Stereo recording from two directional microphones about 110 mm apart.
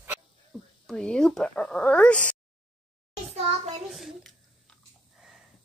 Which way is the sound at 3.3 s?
70° right (ahead or behind).